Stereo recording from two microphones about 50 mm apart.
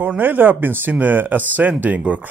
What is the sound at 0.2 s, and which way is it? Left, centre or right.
Speech, right.